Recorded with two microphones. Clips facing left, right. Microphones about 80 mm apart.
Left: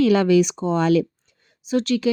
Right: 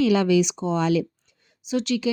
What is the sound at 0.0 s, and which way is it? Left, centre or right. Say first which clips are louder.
Speech: left 3 dB; left.